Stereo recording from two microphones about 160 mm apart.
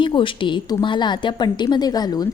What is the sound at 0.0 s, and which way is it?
A woman's voice, 30° left (ahead or behind).